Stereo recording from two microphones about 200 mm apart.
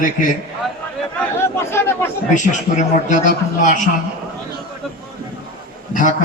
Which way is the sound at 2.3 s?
40° left (ahead or behind).